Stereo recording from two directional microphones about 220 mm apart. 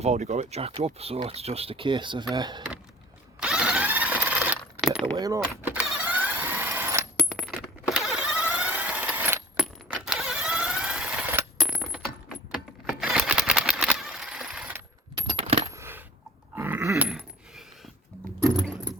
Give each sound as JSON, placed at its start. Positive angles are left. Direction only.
{"t": 0.0, "sound": "speech", "side_deg": -30}
{"t": 3.4, "sound": "zipper", "side_deg": -5}
{"t": 5.1, "sound": "speech", "side_deg": -15}
{"t": 5.8, "sound": "vehicle", "side_deg": -5}
{"t": 7.2, "sound": "coin", "side_deg": 0}
{"t": 7.9, "sound": "vehicle", "side_deg": 0}
{"t": 11.7, "sound": "coin", "side_deg": 5}
{"t": 12.5, "sound": "typewriter", "side_deg": 0}
{"t": 15.4, "sound": "coin", "side_deg": -25}
{"t": 15.7, "sound": "coin", "side_deg": -10}
{"t": 16.6, "sound": "a sound", "side_deg": -10}